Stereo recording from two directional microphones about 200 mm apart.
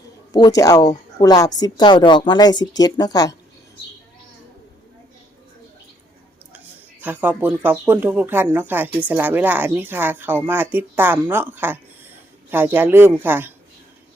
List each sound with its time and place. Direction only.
0.3 s a woman's voice: 20° left (ahead or behind)
7.0 s speech: 10° right (ahead or behind)